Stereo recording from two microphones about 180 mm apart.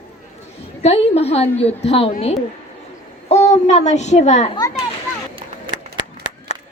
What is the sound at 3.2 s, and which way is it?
A child's voice, 35° left (ahead or behind).